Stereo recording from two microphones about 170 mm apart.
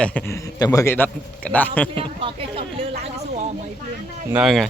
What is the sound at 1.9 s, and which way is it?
Speech, 30° right (ahead or behind).